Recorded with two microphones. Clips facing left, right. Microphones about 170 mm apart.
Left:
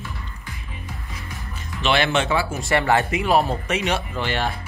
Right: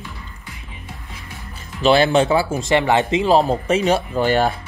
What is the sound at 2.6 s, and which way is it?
A man's voice, 20° right (ahead or behind).